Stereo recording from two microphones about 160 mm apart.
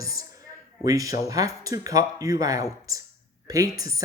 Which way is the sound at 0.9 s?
20° right (ahead or behind).